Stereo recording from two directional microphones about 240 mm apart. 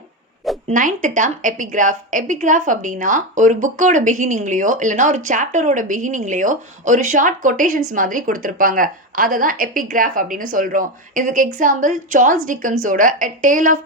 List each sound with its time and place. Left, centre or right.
0.7 s speech: right